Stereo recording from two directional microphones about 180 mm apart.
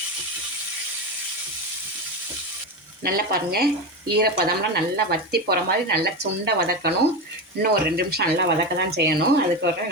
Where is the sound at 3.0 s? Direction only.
55° right (ahead or behind).